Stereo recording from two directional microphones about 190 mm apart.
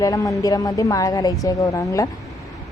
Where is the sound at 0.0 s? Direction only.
15° left (ahead or behind).